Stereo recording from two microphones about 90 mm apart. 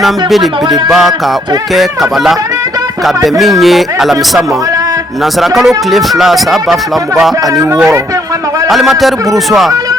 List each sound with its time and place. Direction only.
0.0 s speech: centre (ahead or behind)
7.5 s speech: 35° right (ahead or behind)
8.7 s speech: centre (ahead or behind)